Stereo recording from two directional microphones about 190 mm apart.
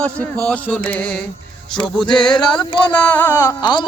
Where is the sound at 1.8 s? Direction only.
25° left (ahead or behind).